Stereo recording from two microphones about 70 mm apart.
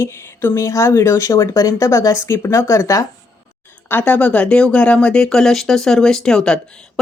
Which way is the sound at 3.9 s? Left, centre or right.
Left.